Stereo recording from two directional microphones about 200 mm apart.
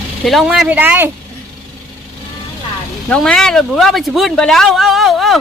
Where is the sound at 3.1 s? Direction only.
5° left (ahead or behind).